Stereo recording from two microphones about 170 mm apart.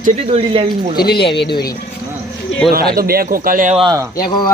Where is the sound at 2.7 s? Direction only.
60° right (ahead or behind).